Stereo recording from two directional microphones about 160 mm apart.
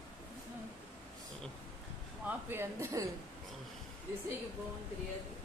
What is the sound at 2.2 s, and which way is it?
Speech, 15° right (ahead or behind).